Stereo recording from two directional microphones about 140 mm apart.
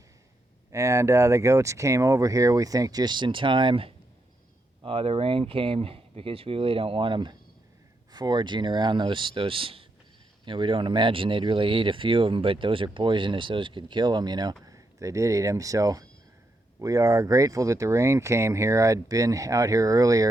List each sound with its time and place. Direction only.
0.7 s speech: 20° right (ahead or behind)